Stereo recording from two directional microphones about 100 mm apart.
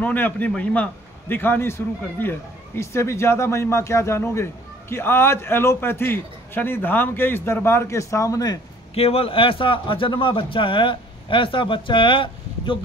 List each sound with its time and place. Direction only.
0.0 s a man's voice: 15° left (ahead or behind); by 8.5 s 35° left (ahead or behind)
8.9 s a man's voice: 80° left; by 12.7 s 60° left (ahead or behind)